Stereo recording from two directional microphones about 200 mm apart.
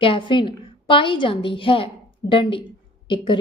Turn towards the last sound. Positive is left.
turn(degrees=25)  # may be behind; listen again after turning